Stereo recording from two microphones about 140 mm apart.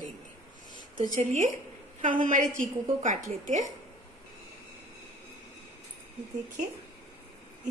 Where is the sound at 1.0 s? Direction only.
70° right (ahead or behind).